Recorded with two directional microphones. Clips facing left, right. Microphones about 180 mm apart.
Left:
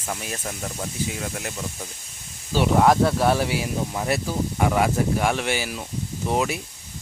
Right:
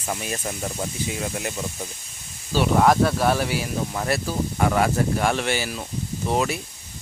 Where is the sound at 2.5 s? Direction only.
20° left (ahead or behind).